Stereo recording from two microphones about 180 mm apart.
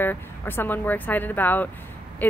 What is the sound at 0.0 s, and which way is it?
Speech, 10° left (ahead or behind).